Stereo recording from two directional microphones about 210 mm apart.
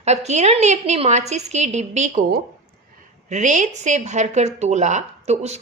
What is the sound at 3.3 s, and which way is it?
Speech, 35° right (ahead or behind).